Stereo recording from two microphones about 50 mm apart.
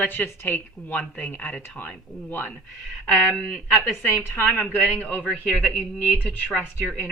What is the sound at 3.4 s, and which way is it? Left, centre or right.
Speech, centre.